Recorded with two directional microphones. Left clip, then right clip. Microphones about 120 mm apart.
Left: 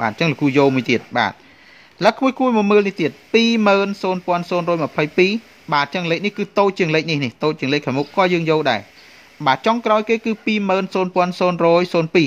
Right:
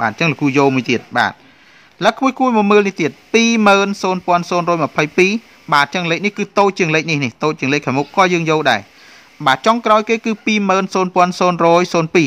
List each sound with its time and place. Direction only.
0.0 s speech: 10° right (ahead or behind)